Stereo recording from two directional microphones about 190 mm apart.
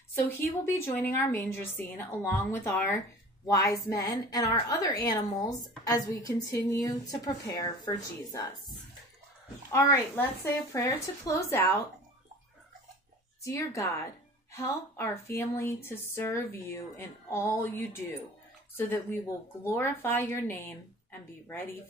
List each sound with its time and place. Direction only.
0.1 s a woman's voice: 15° left (ahead or behind)
9.7 s a woman's voice: 15° left (ahead or behind)
13.4 s a woman's voice: 15° left (ahead or behind)